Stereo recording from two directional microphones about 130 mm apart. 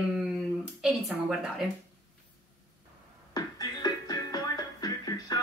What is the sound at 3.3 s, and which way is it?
Music, 30° left (ahead or behind).